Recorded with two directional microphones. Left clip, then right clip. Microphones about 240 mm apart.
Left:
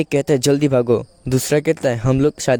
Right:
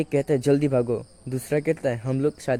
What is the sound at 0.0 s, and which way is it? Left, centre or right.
Speech, left.